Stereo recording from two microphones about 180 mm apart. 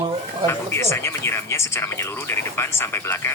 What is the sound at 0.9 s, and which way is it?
Speech, 15° left (ahead or behind).